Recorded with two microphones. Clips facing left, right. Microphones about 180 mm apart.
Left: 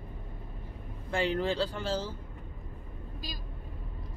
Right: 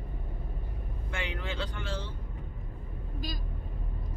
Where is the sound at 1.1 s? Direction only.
35° left (ahead or behind).